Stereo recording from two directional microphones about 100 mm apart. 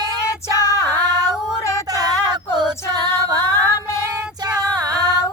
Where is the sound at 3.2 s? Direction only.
30° left (ahead or behind).